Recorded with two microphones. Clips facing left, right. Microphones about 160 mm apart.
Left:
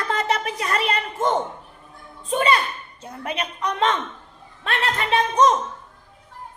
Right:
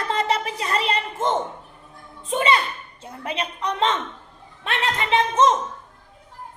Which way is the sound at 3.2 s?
30° right (ahead or behind).